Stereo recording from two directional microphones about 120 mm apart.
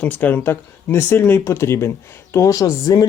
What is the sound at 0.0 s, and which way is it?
Speech, 15° left (ahead or behind).